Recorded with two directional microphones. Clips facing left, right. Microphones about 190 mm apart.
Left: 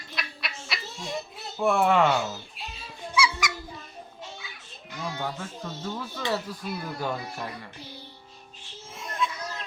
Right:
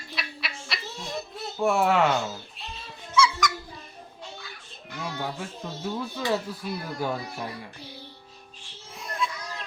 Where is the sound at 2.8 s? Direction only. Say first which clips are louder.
Right 3 dB; 10° left (ahead or behind).